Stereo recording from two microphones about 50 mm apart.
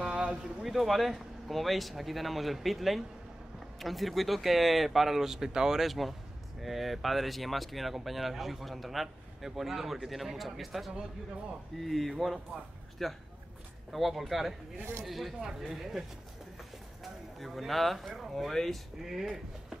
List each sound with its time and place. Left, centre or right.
0.0 s a sound: centre
0.7 s speech: centre
18.5 s speech: centre